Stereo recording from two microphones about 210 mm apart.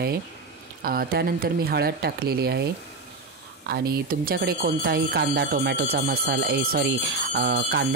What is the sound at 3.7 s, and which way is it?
Speech, 50° right (ahead or behind).